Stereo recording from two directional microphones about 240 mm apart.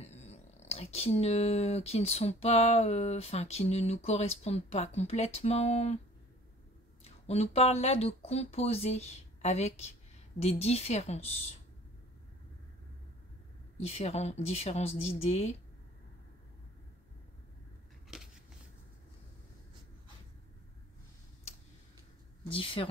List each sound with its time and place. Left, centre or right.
0.0 s speech: left
7.2 s speech: left
13.7 s speech: left
18.1 s a sound: centre
22.5 s speech: left